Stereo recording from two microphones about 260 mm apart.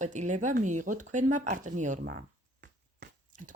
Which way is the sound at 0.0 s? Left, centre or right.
Right.